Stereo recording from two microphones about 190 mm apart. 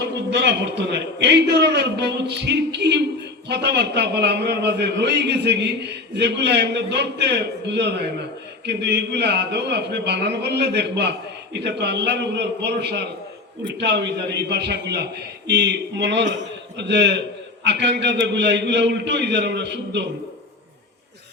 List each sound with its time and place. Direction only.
0.1 s a man's voice: 65° right (ahead or behind)